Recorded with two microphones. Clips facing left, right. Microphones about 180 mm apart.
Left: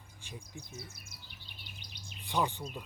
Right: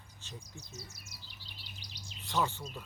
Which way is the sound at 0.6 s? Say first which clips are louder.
Left 2 dB; 55° left (ahead or behind).